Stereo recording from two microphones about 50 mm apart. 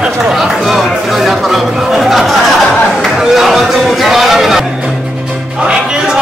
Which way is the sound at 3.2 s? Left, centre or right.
Centre.